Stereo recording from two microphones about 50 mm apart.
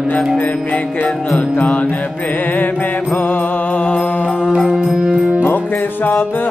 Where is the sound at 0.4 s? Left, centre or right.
Left.